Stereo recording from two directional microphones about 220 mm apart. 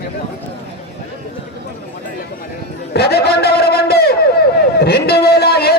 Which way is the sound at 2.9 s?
45° left (ahead or behind).